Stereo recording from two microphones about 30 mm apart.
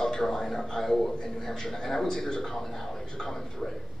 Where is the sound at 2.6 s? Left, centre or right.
Centre.